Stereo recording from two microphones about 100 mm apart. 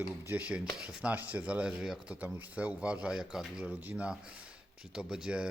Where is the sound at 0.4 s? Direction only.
10° right (ahead or behind).